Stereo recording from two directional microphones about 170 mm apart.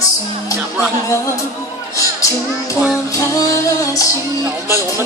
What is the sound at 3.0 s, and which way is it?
Music, 20° left (ahead or behind).